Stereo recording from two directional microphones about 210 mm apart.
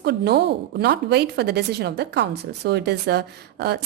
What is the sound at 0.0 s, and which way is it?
A woman's voice, 50° right (ahead or behind).